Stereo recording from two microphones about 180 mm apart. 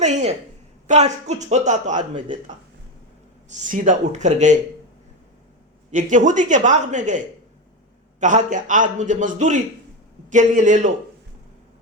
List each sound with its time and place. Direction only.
0.0 s a sound: 40° right (ahead or behind)
0.9 s speech: 40° right (ahead or behind)
3.7 s speech: 45° right (ahead or behind)
5.9 s a man's voice: 45° right (ahead or behind)
8.2 s a man's voice: 45° right (ahead or behind)